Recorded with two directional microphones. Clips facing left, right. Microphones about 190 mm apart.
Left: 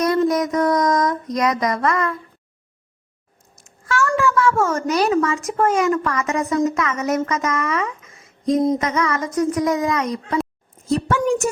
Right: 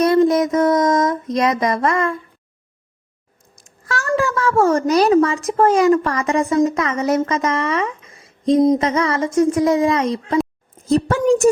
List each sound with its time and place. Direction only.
0.0 s child singing: 25° right (ahead or behind)
3.8 s a woman's voice: 35° right (ahead or behind)